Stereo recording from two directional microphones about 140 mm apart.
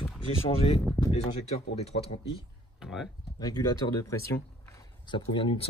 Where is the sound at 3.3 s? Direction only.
30° left (ahead or behind).